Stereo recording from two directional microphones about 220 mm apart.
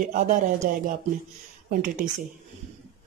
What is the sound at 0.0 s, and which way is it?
Speech, 35° right (ahead or behind).